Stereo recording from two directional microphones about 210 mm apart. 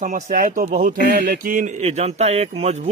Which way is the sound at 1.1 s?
50° right (ahead or behind).